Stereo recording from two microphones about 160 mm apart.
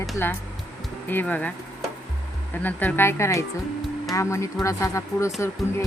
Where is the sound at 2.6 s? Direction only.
10° left (ahead or behind).